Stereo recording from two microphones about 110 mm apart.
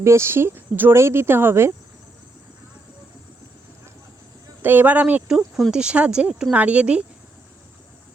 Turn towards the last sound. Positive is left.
turn(degrees=-10)  # may be behind; listen again after turning